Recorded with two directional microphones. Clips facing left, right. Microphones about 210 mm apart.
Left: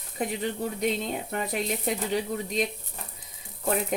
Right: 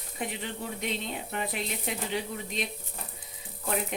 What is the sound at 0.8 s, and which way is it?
A woman's voice, 40° left (ahead or behind).